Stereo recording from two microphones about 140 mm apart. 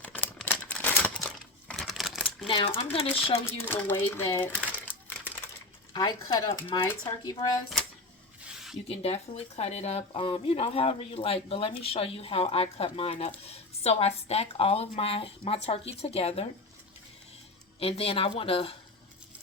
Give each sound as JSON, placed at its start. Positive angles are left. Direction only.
{"t": 0.4, "sound": "crumpling", "side_deg": 15}
{"t": 2.5, "sound": "speech", "side_deg": 40}
{"t": 3.4, "sound": "speech", "side_deg": 15}
{"t": 4.4, "sound": "a sound", "side_deg": 15}
{"t": 5.9, "sound": "speech", "side_deg": 30}
{"t": 8.9, "sound": "speech", "side_deg": 45}
{"t": 17.7, "sound": "speech", "side_deg": 45}